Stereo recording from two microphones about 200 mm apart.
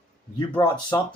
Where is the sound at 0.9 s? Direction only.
20° left (ahead or behind).